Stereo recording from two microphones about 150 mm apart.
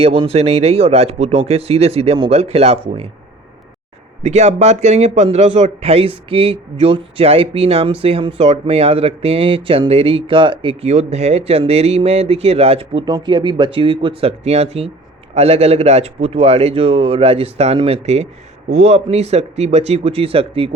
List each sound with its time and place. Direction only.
0.0 s speech: 40° right (ahead or behind)
4.2 s speech: 50° right (ahead or behind)